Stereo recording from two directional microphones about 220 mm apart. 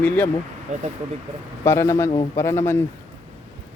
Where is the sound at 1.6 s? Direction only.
10° left (ahead or behind).